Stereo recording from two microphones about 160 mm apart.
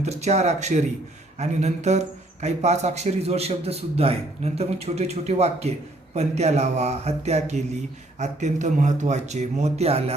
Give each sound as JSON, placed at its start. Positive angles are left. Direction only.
{"t": 0.0, "sound": "speech", "side_deg": -45}